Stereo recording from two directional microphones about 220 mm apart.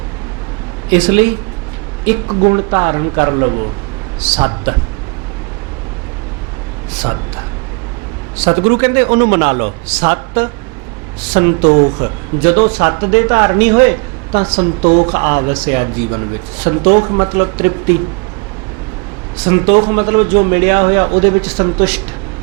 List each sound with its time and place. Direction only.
0.9 s a man's voice: 10° right (ahead or behind)
2.2 s a man's voice: 20° right (ahead or behind)
8.4 s a man's voice: 10° right (ahead or behind)
11.7 s a man's voice: 25° right (ahead or behind)
12.4 s a man's voice: 10° right (ahead or behind)
14.4 s a man's voice: 25° right (ahead or behind)
15.1 s a man's voice: 15° right (ahead or behind)
19.4 s a man's voice: 10° right (ahead or behind)